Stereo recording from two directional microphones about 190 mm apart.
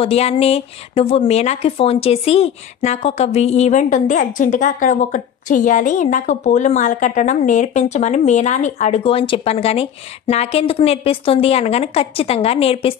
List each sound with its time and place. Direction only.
0.0 s speech: 30° left (ahead or behind)